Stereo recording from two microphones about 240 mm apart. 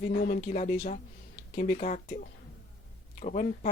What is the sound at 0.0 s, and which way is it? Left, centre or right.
Speech, left.